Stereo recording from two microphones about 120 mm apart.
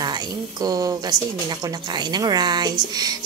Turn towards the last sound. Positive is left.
turn(degrees=-35)  # may be behind; listen again after turning